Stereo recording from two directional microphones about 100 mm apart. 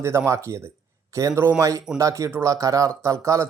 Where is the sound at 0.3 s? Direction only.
30° right (ahead or behind).